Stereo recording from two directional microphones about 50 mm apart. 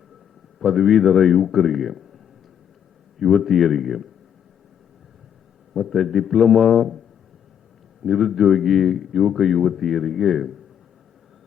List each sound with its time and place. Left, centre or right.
0.6 s speech: centre
5.7 s speech: centre
8.0 s speech: centre